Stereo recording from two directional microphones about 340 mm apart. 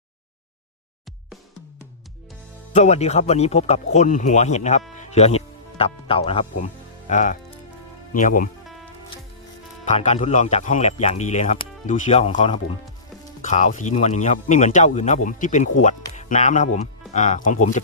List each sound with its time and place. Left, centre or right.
2.7 s speech: centre
4.9 s music: centre
7.1 s speech: left
9.8 s speech: left